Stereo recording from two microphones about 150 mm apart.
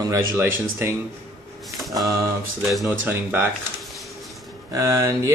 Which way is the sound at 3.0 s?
15° right (ahead or behind).